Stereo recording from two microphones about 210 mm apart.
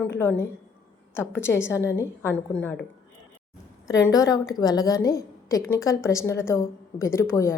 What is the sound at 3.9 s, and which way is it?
A woman's voice, 15° left (ahead or behind).